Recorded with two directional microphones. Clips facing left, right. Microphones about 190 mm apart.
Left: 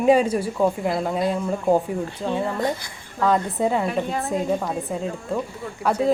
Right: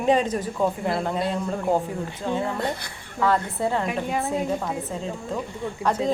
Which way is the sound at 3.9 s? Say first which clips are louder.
Left 1 dB; 10° right (ahead or behind).